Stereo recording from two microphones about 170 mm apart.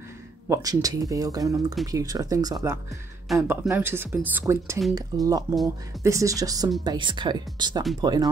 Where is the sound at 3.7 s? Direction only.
15° right (ahead or behind).